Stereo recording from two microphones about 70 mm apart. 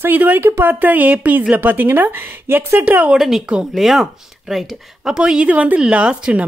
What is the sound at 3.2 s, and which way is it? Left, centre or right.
Speech, centre.